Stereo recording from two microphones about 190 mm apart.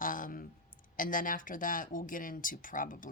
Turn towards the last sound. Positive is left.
turn(degrees=45)  # may be behind; listen again after turning